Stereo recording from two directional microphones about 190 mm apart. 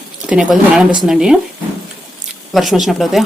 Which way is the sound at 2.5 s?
Centre (ahead or behind).